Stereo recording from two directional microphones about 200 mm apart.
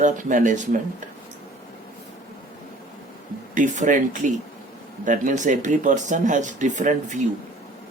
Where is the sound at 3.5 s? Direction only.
40° right (ahead or behind).